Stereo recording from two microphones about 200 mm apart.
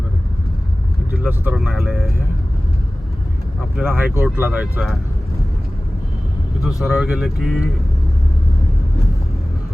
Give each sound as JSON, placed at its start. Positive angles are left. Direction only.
{"t": 1.1, "sound": "speech", "side_deg": -5}
{"t": 3.8, "sound": "speech", "side_deg": -10}
{"t": 6.8, "sound": "speech", "side_deg": 0}